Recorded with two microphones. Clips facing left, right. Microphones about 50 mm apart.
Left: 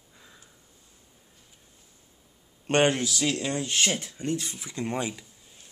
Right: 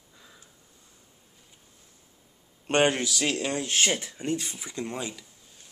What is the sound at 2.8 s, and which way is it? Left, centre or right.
Speech, right.